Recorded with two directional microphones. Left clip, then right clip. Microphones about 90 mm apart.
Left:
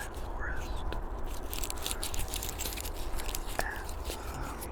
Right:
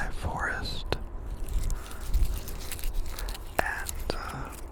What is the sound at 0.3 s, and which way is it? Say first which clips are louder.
Whispering: right 9 dB; 35° right (ahead or behind).